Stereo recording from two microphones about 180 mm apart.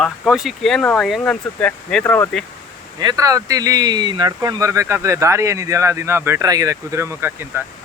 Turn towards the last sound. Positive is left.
turn(degrees=-15)  # may be behind; listen again after turning